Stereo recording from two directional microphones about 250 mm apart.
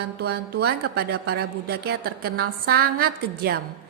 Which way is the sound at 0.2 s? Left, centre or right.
Right.